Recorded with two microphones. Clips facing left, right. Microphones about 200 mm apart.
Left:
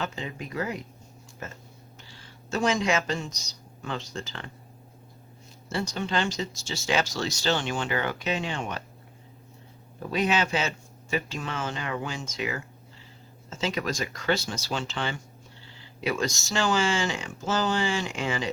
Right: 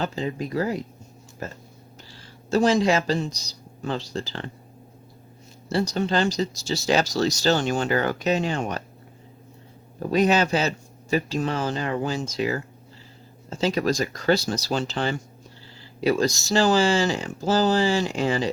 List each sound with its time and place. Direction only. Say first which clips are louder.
0.0 s speech: right 7 dB; 35° right (ahead or behind)
2.0 s speech: right 7 dB; 35° right (ahead or behind)
5.6 s speech: right 7 dB; 35° right (ahead or behind)
10.0 s speech: right 6 dB; 40° right (ahead or behind)